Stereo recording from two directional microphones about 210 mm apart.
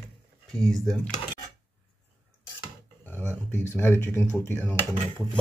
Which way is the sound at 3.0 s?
10° left (ahead or behind).